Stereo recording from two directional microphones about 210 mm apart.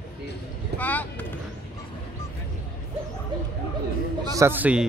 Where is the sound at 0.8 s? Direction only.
10° left (ahead or behind).